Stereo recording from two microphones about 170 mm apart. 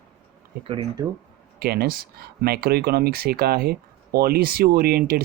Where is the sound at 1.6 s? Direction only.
65° right (ahead or behind).